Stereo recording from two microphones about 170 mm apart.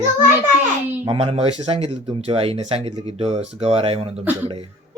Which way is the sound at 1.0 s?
35° right (ahead or behind).